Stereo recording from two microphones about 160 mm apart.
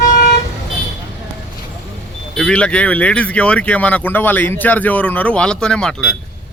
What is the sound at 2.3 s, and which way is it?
Speech, 5° left (ahead or behind).